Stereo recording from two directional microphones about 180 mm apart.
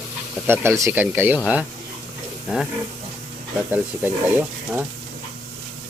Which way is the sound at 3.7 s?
10° right (ahead or behind).